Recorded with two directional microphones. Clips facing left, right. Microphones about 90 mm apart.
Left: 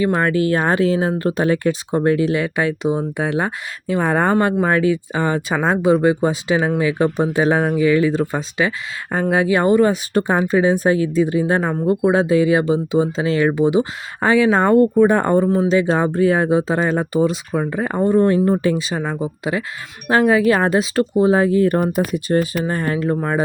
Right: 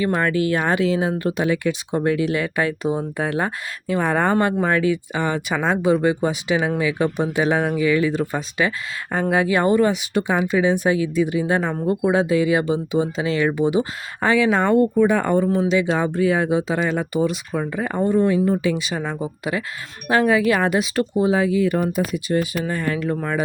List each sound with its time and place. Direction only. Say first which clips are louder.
0.0 s speech: left 3 dB; 30° left (ahead or behind)
4.3 s speech: left 2 dB; 30° left (ahead or behind)
18.1 s speech: left 3 dB; 45° left (ahead or behind)
18.6 s speech: left 3 dB; 35° left (ahead or behind)
18.9 s speech: left 3 dB; 5° left (ahead or behind)
19.2 s speech: left 3 dB; 25° left (ahead or behind)